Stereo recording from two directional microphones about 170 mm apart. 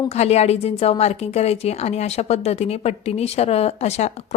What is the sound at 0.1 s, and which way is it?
A woman's voice, 40° left (ahead or behind).